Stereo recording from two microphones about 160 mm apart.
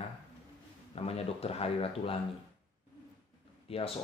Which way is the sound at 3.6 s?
35° left (ahead or behind).